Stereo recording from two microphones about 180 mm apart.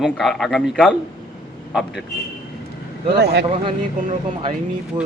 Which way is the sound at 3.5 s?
30° right (ahead or behind).